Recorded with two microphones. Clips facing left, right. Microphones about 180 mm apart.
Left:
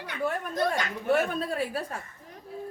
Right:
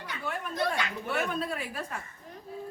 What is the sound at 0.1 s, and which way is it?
A woman's voice, 45° left (ahead or behind).